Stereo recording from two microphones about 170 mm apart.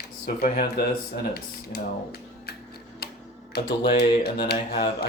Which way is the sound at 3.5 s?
75° left (ahead or behind).